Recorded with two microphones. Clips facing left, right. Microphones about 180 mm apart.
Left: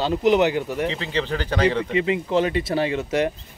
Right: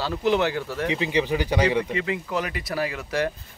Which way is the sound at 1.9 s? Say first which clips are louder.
Left 6 dB; 20° left (ahead or behind).